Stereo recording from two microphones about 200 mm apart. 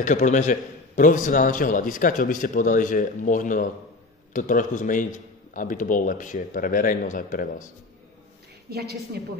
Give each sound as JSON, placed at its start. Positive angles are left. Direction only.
{"t": 0.0, "sound": "a man's voice", "side_deg": 40}
{"t": 8.6, "sound": "a woman's voice", "side_deg": -55}